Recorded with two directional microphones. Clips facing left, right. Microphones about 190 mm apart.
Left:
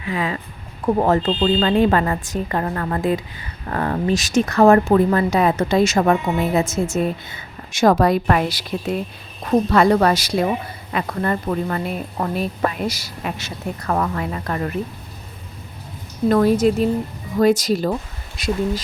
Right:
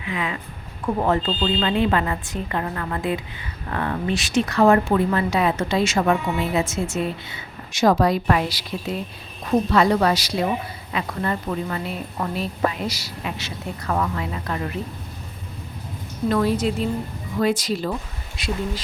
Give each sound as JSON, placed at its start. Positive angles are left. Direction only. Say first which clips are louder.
{"t": 0.0, "sound": "a woman's voice", "louder": "left 4 dB", "side_deg": 40}
{"t": 16.3, "sound": "a woman's voice", "louder": "left 6 dB", "side_deg": 45}